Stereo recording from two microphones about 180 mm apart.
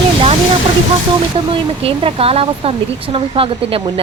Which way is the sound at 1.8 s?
30° right (ahead or behind).